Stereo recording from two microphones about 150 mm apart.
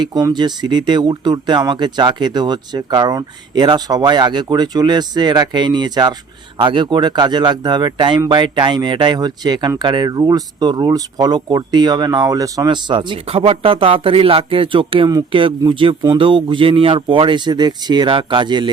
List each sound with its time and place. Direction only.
0.0 s speech: 25° right (ahead or behind)